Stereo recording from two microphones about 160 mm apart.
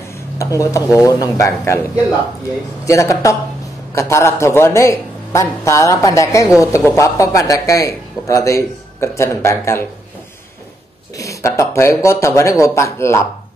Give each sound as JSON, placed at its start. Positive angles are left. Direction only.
{"t": 0.4, "sound": "a man's voice", "side_deg": 20}
{"t": 2.8, "sound": "a man's voice", "side_deg": 20}
{"t": 11.1, "sound": "a man's voice", "side_deg": 20}